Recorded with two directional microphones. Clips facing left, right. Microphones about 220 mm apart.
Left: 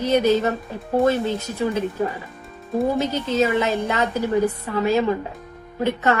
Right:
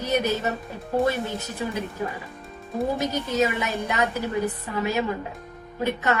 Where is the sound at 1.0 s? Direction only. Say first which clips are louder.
Left 9 dB; 15° right (ahead or behind).